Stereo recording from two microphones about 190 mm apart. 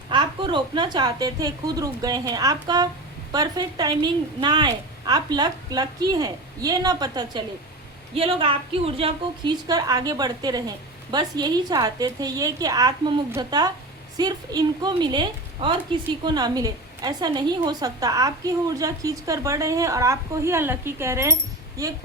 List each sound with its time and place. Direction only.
0.1 s a woman's voice: 25° right (ahead or behind)